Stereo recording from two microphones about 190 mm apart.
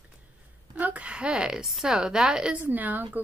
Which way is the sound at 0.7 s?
10° right (ahead or behind).